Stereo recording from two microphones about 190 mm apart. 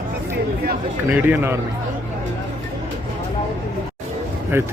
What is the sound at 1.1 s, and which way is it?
Speech, 10° right (ahead or behind).